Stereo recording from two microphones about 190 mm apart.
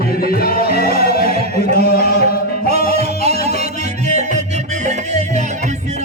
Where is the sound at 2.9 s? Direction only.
35° right (ahead or behind).